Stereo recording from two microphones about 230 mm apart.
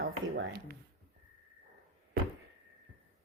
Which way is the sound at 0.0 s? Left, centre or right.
Right.